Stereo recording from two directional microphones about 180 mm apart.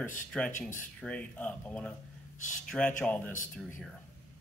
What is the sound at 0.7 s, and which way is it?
Speech, 5° left (ahead or behind).